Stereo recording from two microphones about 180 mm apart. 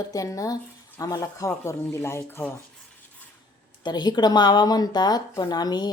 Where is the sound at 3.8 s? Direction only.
25° left (ahead or behind).